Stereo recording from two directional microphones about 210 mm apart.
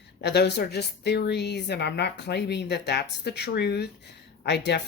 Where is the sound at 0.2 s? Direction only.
55° left (ahead or behind).